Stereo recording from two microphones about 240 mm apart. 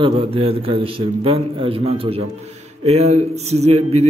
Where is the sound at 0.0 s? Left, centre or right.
Right.